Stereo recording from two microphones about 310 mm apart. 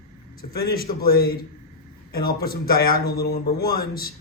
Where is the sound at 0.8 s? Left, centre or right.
Left.